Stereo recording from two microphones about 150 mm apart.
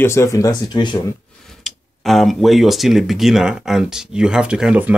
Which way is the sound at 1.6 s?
Centre (ahead or behind).